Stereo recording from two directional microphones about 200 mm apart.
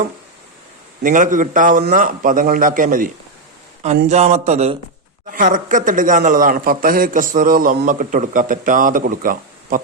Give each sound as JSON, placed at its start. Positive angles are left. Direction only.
{"t": 1.0, "sound": "a man's voice", "side_deg": -40}
{"t": 4.1, "sound": "a man's voice", "side_deg": -35}